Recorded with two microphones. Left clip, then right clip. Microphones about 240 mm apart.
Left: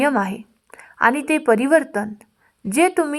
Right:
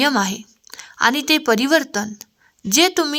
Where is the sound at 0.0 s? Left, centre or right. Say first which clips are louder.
Right 1 dB; right.